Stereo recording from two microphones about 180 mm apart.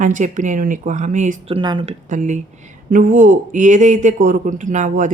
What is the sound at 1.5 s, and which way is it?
A man's voice, 30° right (ahead or behind).